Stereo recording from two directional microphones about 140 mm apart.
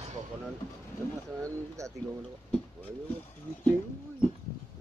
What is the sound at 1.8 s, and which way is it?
Speech, 20° right (ahead or behind).